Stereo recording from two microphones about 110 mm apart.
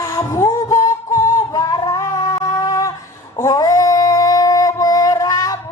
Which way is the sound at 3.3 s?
30° left (ahead or behind).